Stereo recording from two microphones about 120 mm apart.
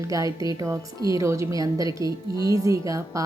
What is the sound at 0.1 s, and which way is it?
A woman's voice, 30° right (ahead or behind).